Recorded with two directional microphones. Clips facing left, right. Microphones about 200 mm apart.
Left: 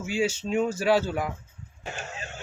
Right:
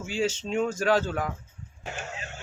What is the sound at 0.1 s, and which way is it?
Speech, 10° left (ahead or behind).